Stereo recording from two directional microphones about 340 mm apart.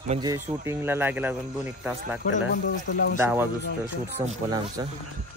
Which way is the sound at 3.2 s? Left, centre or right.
Centre.